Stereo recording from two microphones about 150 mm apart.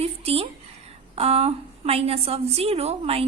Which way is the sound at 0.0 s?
40° right (ahead or behind).